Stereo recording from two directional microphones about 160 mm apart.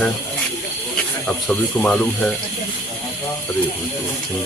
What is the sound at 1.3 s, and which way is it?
Speech, 5° left (ahead or behind).